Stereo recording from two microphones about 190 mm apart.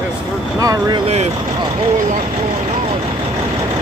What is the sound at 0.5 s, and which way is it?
Speech, 20° right (ahead or behind).